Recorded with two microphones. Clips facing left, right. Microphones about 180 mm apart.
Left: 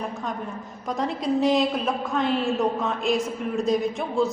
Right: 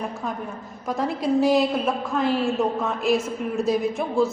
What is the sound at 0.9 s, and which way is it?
A woman's voice, 5° right (ahead or behind).